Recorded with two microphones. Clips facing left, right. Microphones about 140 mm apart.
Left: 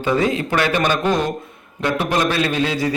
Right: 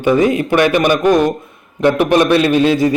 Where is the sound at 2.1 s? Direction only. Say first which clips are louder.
Right 7 dB; 20° right (ahead or behind).